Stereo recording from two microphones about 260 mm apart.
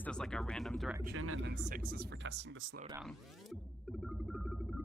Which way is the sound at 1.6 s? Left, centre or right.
Right.